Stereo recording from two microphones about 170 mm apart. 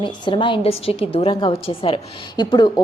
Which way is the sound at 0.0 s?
30° left (ahead or behind).